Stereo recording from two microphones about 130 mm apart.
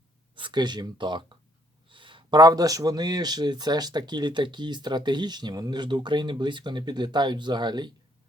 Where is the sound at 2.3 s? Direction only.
30° right (ahead or behind).